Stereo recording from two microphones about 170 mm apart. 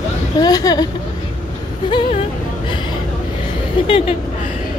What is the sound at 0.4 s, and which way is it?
Speech, 20° left (ahead or behind).